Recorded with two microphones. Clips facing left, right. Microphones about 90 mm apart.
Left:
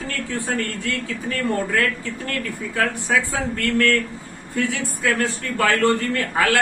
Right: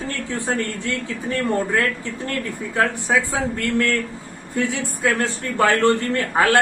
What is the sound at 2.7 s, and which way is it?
A man's voice, 20° right (ahead or behind).